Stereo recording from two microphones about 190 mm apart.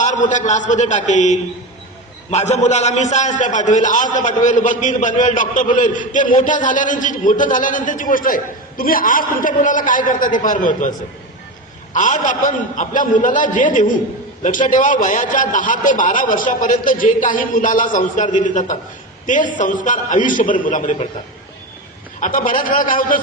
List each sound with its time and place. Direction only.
0.0 s a man's voice: 40° left (ahead or behind)
11.9 s a man's voice: 40° left (ahead or behind)
22.2 s a man's voice: 45° left (ahead or behind)